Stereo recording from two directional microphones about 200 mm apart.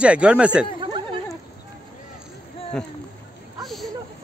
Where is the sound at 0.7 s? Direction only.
25° right (ahead or behind).